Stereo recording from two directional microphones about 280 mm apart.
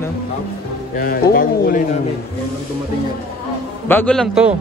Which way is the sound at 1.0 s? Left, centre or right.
Left.